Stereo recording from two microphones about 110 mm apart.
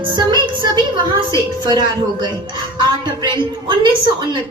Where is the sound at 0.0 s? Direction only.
45° right (ahead or behind).